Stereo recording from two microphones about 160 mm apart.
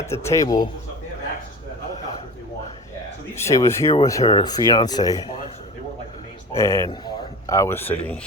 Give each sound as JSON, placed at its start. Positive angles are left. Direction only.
{"t": 0.1, "sound": "speech", "side_deg": 20}
{"t": 3.3, "sound": "speech", "side_deg": 20}
{"t": 6.6, "sound": "a man's voice", "side_deg": 20}